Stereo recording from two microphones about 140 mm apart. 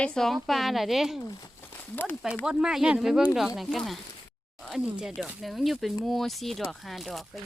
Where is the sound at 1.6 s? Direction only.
15° left (ahead or behind).